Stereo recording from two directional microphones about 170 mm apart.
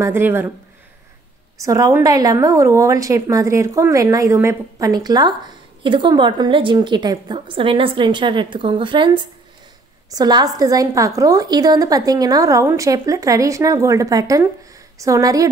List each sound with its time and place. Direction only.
0.0 s speech: 15° right (ahead or behind)
1.6 s a woman's voice: 20° right (ahead or behind)